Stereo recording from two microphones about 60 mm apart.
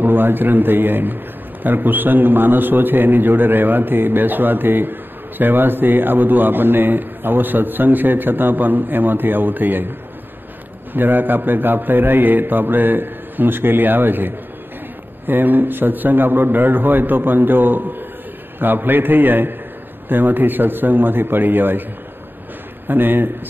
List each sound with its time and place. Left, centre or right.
0.0 s speech: right
10.9 s speech: right
22.8 s speech: right